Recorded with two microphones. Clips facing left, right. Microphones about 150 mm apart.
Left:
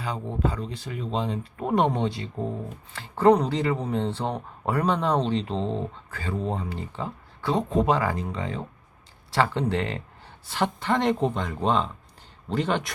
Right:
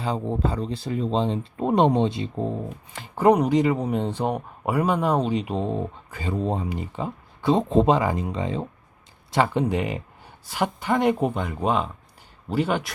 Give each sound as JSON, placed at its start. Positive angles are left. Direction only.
{"t": 0.0, "sound": "speech", "side_deg": -30}